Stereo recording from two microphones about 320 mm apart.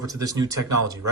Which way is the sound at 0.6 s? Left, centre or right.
Right.